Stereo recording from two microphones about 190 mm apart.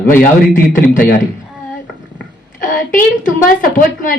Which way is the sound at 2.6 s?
45° left (ahead or behind).